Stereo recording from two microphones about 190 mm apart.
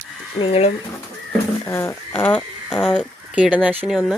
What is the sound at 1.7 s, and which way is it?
Speech, 15° left (ahead or behind).